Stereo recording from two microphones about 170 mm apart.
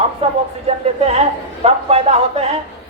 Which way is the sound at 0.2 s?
35° right (ahead or behind).